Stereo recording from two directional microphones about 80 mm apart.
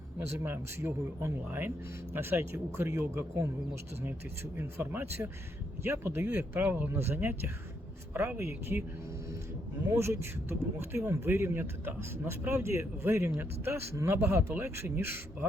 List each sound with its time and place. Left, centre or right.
0.2 s speech: right
4.5 s speech: right
6.2 s speech: centre
9.9 s speech: right